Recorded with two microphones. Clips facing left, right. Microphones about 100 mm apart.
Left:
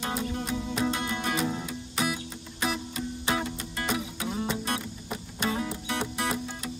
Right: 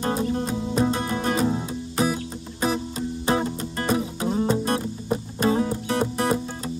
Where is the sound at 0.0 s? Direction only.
35° right (ahead or behind).